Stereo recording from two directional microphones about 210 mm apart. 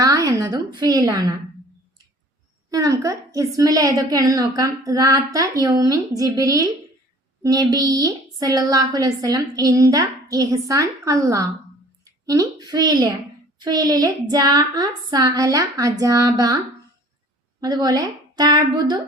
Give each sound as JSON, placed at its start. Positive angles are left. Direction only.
{"t": 0.0, "sound": "a sound", "side_deg": -15}
{"t": 0.8, "sound": "a woman's voice", "side_deg": -20}
{"t": 2.6, "sound": "a woman's voice", "side_deg": -15}
{"t": 17.6, "sound": "a woman's voice", "side_deg": -20}